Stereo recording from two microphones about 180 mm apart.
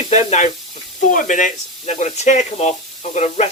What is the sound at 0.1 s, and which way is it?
Speech, 40° left (ahead or behind).